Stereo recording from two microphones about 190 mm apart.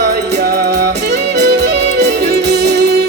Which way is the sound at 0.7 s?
60° right (ahead or behind).